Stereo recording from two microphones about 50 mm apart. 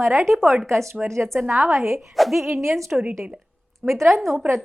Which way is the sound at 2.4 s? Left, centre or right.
Right.